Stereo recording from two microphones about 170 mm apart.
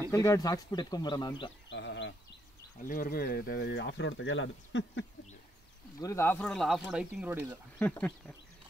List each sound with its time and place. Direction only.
0.1 s speech: 15° left (ahead or behind)
1.7 s a sound: 90° left
2.8 s speech: 55° left (ahead or behind); by 5.0 s 90° left
5.9 s speech: 15° left (ahead or behind); by 7.4 s 10° right (ahead or behind)
7.8 s speech: 10° left (ahead or behind)